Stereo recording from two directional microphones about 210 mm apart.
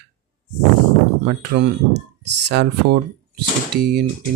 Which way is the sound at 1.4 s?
55° right (ahead or behind).